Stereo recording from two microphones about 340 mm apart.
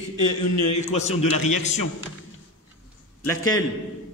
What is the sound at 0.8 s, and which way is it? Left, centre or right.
Speech, centre.